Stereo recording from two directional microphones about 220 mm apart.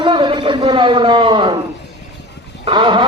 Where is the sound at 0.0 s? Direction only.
20° right (ahead or behind).